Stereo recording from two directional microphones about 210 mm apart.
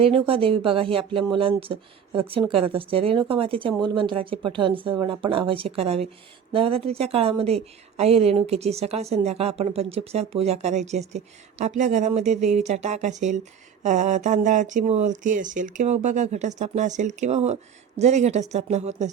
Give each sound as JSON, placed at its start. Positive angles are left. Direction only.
{"t": 0.0, "sound": "speech", "side_deg": -25}